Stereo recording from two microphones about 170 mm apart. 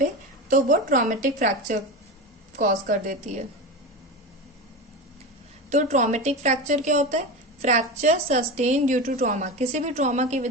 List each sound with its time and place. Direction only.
0.5 s speech: 50° right (ahead or behind)
5.7 s speech: 45° right (ahead or behind)